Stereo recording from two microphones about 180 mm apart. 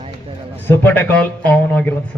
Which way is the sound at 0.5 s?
10° left (ahead or behind).